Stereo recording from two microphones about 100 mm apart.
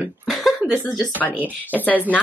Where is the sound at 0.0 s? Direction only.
Centre (ahead or behind).